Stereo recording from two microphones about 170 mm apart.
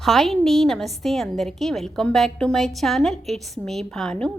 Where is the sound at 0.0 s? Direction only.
Centre (ahead or behind).